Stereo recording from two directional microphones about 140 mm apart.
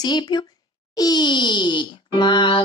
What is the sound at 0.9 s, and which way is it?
Speech, 30° left (ahead or behind).